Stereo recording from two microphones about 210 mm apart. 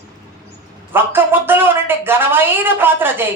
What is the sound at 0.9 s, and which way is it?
A woman's voice, 10° right (ahead or behind).